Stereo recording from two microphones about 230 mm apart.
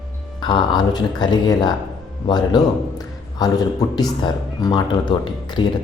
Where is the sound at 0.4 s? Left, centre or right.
Centre.